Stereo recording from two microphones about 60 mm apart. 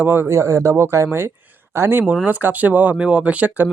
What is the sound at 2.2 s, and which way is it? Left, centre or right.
Speech, right.